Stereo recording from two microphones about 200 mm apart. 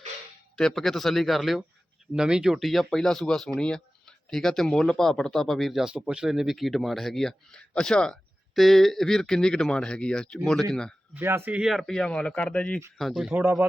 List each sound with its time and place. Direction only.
0.5 s speech: centre (ahead or behind)
11.1 s speech: 10° right (ahead or behind)